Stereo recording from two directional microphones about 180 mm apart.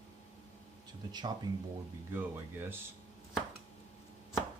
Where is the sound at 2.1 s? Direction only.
10° right (ahead or behind).